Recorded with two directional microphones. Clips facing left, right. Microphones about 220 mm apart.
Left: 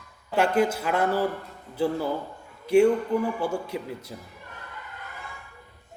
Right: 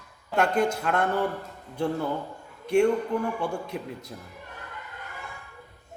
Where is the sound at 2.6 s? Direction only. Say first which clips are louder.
Left 3 dB; 5° left (ahead or behind).